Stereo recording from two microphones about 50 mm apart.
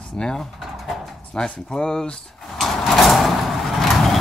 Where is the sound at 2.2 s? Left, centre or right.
Centre.